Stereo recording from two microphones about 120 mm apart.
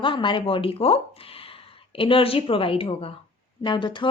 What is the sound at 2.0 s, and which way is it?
A woman's voice, 45° left (ahead or behind).